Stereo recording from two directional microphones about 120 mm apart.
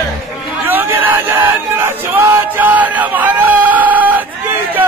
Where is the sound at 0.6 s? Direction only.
15° right (ahead or behind).